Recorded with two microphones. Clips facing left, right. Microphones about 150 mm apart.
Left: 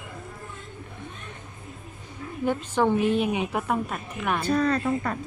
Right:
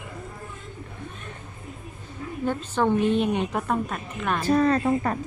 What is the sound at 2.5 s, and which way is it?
A woman's voice, 10° left (ahead or behind).